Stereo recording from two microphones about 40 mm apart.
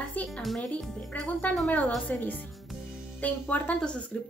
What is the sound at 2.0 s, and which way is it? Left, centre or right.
Speech, left.